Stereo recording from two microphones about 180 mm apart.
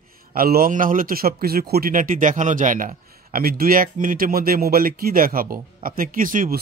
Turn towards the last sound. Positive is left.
turn(degrees=-50)  # may be behind; listen again after turning